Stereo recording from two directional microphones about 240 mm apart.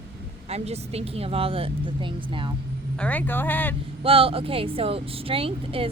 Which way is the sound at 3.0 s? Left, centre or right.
Centre.